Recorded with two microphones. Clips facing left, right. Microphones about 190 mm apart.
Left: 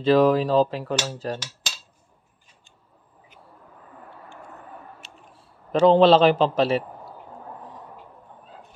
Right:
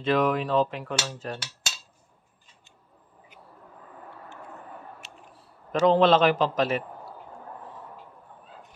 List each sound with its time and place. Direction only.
0.0 s speech: 35° left (ahead or behind)
5.7 s speech: 30° left (ahead or behind)